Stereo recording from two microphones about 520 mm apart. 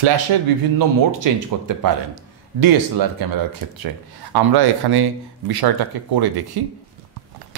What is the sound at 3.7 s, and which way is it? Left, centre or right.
Speech, right.